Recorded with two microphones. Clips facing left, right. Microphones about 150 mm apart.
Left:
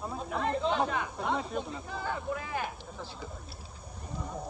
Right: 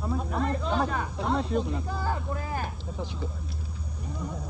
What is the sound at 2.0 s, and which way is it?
Speech, 40° right (ahead or behind).